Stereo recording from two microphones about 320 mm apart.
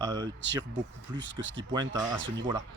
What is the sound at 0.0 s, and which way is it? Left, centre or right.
Speech, centre.